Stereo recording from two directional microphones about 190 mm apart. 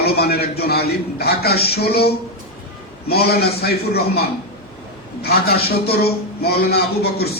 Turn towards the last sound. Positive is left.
turn(degrees=55)  # may be behind; listen again after turning